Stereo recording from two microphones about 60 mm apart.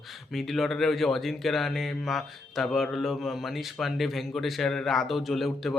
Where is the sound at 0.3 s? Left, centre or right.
Centre.